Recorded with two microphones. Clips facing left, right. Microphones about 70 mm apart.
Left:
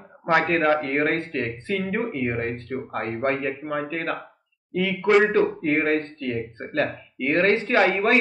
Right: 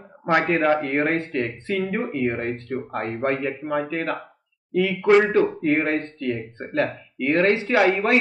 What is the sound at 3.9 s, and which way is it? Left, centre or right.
Speech, right.